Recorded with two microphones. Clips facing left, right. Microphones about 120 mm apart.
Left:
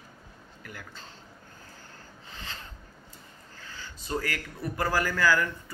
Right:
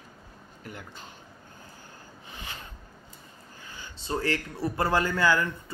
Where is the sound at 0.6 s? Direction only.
25° right (ahead or behind).